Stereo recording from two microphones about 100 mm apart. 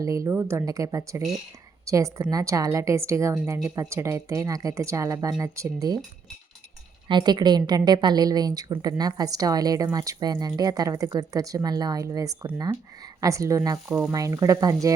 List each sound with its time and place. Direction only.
0.0 s a woman's voice: 30° right (ahead or behind)
7.1 s a woman's voice: 45° right (ahead or behind)